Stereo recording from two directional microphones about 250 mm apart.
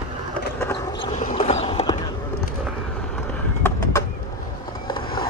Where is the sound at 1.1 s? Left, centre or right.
Left.